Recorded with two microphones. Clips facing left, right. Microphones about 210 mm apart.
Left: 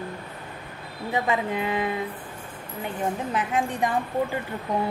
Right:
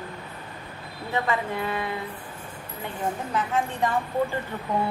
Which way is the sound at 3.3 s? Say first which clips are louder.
Left 1 dB; 15° left (ahead or behind).